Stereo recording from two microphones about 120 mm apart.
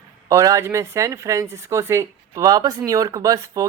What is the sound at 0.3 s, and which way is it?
Speech, 25° right (ahead or behind).